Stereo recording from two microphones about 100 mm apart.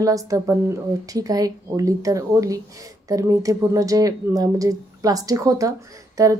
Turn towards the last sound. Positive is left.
turn(degrees=-35)  # may be behind; listen again after turning